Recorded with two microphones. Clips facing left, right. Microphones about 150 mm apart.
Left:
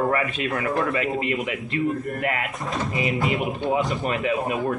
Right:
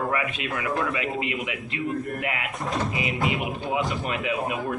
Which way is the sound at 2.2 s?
45° left (ahead or behind).